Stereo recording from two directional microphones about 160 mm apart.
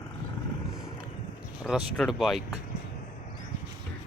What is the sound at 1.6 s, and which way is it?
Speech, centre (ahead or behind).